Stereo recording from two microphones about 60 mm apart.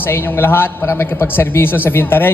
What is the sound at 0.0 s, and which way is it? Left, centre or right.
A man's voice, left.